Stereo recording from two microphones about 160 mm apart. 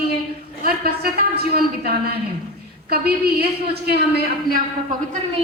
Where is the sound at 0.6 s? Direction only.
70° right (ahead or behind).